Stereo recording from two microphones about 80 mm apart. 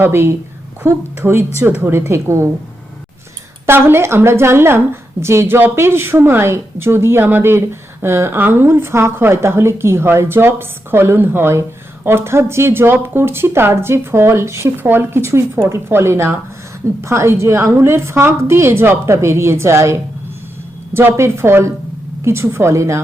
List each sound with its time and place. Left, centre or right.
0.0 s a woman's voice: right
3.7 s a woman's voice: right